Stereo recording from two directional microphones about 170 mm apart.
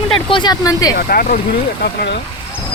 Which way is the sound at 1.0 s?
55° left (ahead or behind).